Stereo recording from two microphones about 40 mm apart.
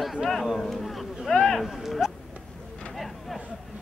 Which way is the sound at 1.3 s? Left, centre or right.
Centre.